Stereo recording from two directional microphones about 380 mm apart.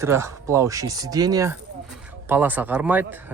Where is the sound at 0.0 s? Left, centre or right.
Centre.